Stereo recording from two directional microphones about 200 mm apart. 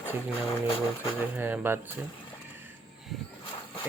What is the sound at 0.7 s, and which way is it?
Speech, 25° left (ahead or behind).